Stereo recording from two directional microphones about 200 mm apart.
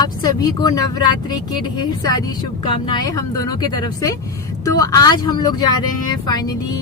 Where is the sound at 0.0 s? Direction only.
20° left (ahead or behind).